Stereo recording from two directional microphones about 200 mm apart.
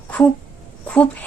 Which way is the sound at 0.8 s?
5° left (ahead or behind).